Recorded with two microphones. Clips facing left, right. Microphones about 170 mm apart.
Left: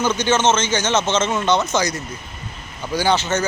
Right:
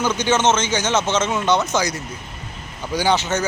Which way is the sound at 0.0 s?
10° right (ahead or behind).